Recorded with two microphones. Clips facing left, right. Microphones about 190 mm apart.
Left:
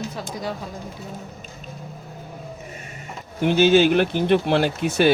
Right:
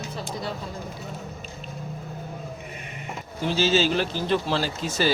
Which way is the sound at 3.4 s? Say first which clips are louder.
Left 7 dB; 55° left (ahead or behind).